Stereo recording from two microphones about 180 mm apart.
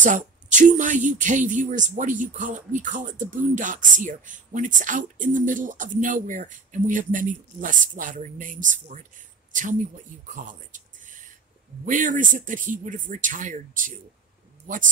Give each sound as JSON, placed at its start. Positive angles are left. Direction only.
{"t": 0.0, "sound": "speech", "side_deg": -45}
{"t": 11.8, "sound": "speech", "side_deg": -45}